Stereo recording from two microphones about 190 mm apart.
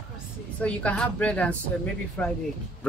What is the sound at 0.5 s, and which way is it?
A woman's voice, 5° left (ahead or behind).